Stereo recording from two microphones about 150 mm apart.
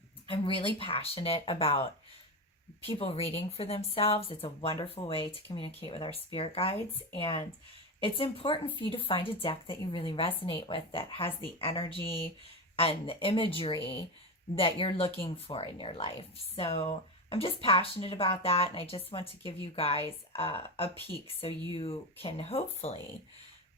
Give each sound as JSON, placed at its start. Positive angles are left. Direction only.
{"t": 0.3, "sound": "speech", "side_deg": 35}
{"t": 2.9, "sound": "speech", "side_deg": 40}